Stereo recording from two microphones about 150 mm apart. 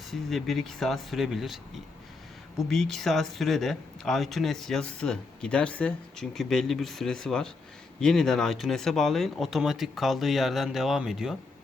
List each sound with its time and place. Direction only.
0.1 s speech: centre (ahead or behind)
2.6 s speech: centre (ahead or behind)